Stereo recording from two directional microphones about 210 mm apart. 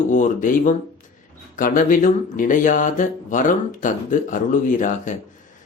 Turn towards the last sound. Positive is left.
turn(degrees=35)  # may be behind; listen again after turning